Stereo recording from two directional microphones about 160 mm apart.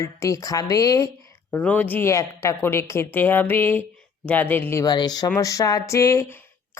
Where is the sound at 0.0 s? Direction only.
20° left (ahead or behind).